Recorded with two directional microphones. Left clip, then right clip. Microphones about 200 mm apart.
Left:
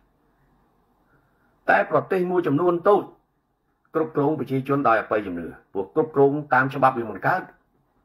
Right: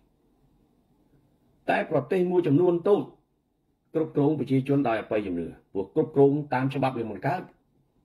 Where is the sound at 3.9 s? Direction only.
15° left (ahead or behind).